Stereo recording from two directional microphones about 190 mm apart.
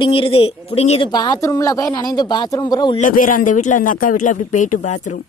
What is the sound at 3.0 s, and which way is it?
A man's voice, 45° left (ahead or behind).